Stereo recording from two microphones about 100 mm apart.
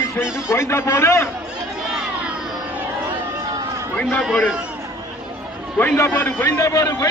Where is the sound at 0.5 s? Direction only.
25° left (ahead or behind).